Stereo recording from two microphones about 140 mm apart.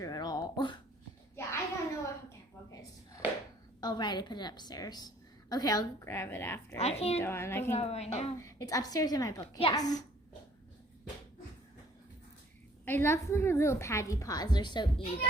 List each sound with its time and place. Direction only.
0.0 s a sound: 30° left (ahead or behind)
1.4 s a sound: 20° left (ahead or behind)
3.8 s a woman's voice: 30° left (ahead or behind)
6.7 s a woman's voice: 45° left (ahead or behind)
7.2 s a child's voice: 20° left (ahead or behind)
7.8 s a woman's voice: 50° left (ahead or behind)
8.4 s a woman's voice: 25° left (ahead or behind)
12.8 s a woman's voice: 15° left (ahead or behind); by 15.0 s 35° left (ahead or behind)